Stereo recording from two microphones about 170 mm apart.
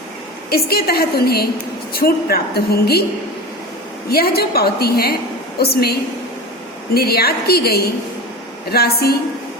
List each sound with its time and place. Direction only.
0.5 s a woman's voice: 65° left (ahead or behind)
4.1 s a woman's voice: 65° left (ahead or behind)